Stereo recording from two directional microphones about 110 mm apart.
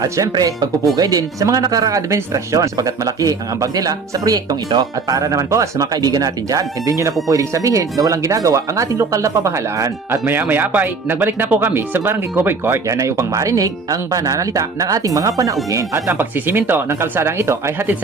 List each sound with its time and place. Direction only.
0.0 s speech: 35° right (ahead or behind)
10.5 s speech: 15° right (ahead or behind)